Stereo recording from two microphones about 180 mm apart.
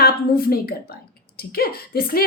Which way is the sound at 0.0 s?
55° left (ahead or behind).